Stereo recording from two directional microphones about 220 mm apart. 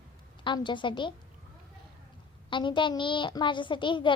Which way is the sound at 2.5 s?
20° left (ahead or behind).